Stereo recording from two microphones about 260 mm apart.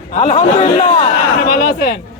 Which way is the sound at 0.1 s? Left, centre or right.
Left.